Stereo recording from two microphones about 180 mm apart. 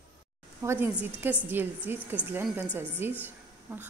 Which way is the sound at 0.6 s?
15° right (ahead or behind).